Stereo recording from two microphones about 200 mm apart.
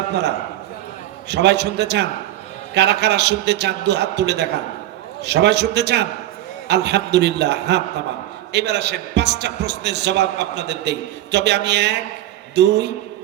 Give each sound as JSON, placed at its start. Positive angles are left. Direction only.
{"t": 0.1, "sound": "a man's voice", "side_deg": -55}